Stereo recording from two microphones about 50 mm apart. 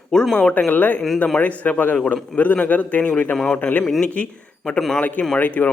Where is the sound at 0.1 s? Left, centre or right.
Centre.